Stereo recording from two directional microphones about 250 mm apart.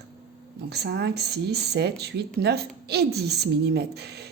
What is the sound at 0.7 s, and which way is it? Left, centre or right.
Speech, right.